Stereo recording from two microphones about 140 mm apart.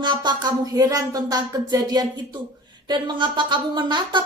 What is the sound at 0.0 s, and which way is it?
Speech, 30° right (ahead or behind).